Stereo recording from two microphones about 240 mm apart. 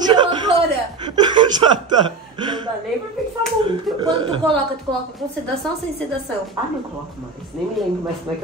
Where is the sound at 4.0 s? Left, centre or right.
Centre.